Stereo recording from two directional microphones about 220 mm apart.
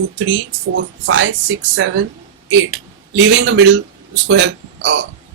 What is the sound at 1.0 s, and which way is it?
Speech, 60° right (ahead or behind).